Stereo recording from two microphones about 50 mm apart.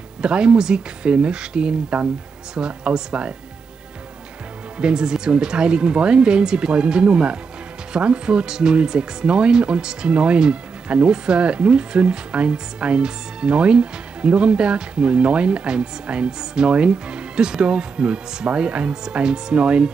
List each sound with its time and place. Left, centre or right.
0.2 s speech: centre
4.7 s speech: centre